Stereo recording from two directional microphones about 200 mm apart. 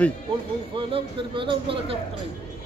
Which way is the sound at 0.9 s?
25° right (ahead or behind).